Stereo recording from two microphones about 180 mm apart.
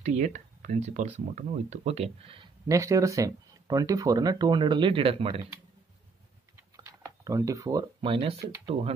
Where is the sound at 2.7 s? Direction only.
20° right (ahead or behind).